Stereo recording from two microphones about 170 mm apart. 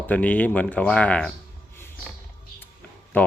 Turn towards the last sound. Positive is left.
turn(degrees=10)  # may be behind; listen again after turning